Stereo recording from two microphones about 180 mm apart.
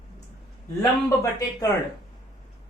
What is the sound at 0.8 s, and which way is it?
Speech, 15° left (ahead or behind).